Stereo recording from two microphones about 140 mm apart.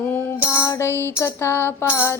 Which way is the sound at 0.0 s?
15° left (ahead or behind).